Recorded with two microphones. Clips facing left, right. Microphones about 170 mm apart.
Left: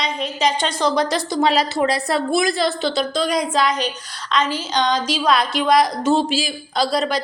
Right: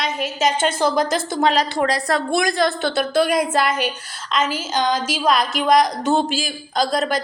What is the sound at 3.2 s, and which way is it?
Speech, 55° right (ahead or behind).